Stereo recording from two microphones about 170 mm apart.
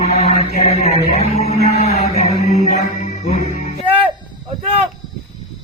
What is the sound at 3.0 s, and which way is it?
Music, 45° left (ahead or behind).